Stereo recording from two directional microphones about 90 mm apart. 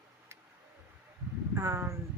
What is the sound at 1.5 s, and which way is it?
Speech, 25° right (ahead or behind).